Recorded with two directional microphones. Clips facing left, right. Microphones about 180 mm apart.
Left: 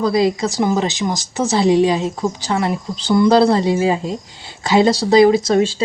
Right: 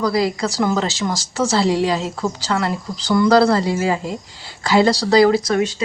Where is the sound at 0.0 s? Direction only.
20° left (ahead or behind).